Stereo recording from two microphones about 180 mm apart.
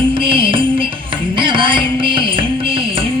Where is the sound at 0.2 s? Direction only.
30° right (ahead or behind).